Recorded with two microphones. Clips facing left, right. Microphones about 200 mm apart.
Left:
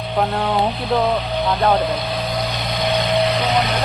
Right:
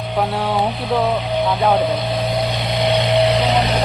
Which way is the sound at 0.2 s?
5° right (ahead or behind).